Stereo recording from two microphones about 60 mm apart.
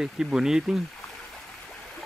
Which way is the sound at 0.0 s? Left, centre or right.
Centre.